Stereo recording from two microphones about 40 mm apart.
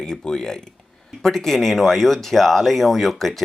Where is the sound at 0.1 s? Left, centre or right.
Centre.